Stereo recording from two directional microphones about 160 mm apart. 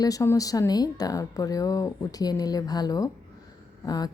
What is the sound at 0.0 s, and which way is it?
A woman's voice, 20° left (ahead or behind).